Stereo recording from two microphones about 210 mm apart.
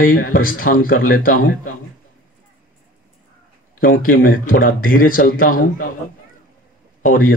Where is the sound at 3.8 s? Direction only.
40° left (ahead or behind).